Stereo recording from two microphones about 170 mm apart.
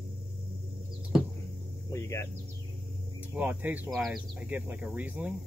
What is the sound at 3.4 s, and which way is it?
Speech, 10° right (ahead or behind).